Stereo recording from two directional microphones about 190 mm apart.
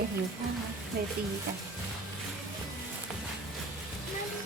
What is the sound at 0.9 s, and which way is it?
Speech, 55° right (ahead or behind).